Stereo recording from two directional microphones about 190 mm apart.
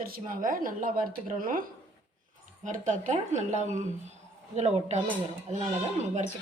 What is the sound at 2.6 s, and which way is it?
Speech, 40° right (ahead or behind).